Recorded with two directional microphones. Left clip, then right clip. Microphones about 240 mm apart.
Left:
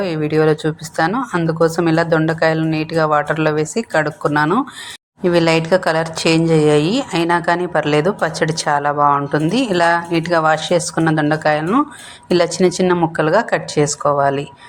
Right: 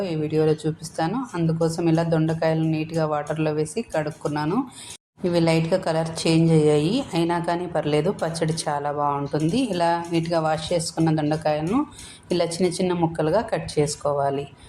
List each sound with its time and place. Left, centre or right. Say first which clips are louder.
0.0 s a woman's voice: left 7 dB; centre